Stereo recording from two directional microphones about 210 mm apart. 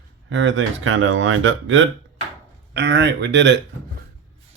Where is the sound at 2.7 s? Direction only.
55° right (ahead or behind).